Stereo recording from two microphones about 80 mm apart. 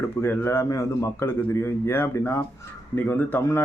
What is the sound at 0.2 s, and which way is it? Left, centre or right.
A man's voice, left.